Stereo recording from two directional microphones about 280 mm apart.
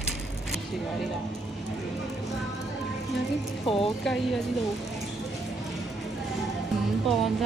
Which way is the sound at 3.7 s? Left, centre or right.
Centre.